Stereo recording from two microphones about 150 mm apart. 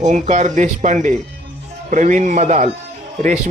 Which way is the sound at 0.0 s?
50° right (ahead or behind).